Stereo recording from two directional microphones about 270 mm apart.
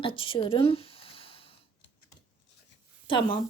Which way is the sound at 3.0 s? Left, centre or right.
Centre.